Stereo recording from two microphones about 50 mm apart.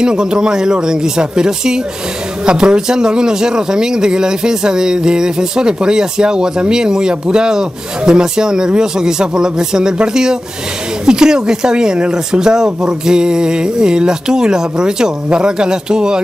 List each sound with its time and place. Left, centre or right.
0.0 s a man's voice: centre